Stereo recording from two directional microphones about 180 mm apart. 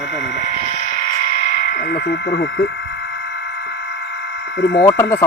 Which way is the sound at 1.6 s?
65° left (ahead or behind).